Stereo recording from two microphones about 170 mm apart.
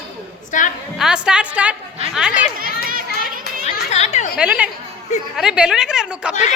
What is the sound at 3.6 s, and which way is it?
Children playing, 40° left (ahead or behind).